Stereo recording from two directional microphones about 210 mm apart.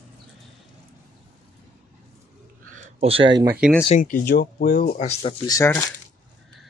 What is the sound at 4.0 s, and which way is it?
Speech, 40° left (ahead or behind).